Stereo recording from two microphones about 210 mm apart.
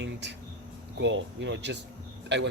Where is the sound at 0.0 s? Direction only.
55° right (ahead or behind).